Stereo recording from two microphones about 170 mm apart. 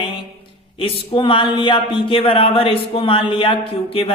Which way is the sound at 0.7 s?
30° left (ahead or behind).